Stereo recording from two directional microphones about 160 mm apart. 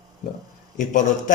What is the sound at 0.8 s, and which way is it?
Speech, 50° left (ahead or behind).